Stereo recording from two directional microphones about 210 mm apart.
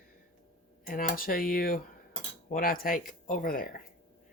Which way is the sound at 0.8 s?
40° left (ahead or behind).